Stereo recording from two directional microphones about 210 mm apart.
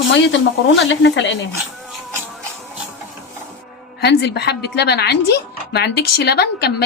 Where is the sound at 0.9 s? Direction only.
60° left (ahead or behind).